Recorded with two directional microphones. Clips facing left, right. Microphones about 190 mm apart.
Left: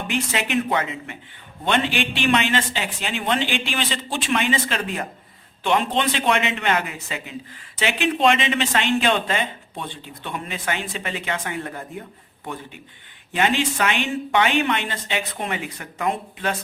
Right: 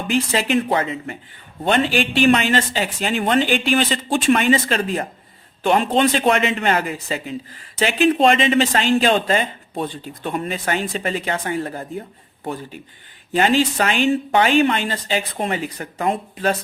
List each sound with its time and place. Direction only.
0.3 s a man's voice: 35° right (ahead or behind)
13.3 s a man's voice: 35° right (ahead or behind)